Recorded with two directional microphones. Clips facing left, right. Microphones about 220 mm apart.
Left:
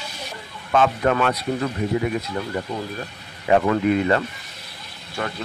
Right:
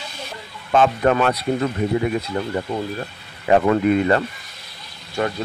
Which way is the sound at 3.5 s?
40° right (ahead or behind).